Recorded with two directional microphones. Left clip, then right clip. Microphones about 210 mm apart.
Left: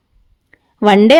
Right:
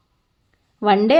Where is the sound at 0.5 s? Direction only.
40° left (ahead or behind).